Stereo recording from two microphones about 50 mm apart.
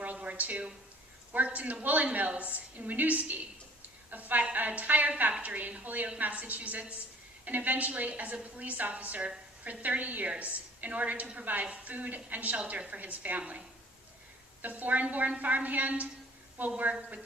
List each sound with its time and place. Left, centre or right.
0.0 s a sound: right
1.3 s a woman's voice: right
14.6 s a woman's voice: right